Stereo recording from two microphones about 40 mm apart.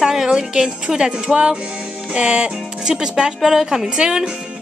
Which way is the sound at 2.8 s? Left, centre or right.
Centre.